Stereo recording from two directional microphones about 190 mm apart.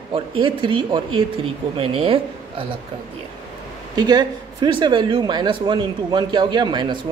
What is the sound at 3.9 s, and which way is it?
Speech, 20° right (ahead or behind).